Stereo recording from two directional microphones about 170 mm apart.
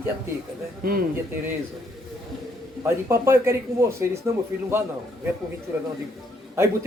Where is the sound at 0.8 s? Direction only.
60° right (ahead or behind).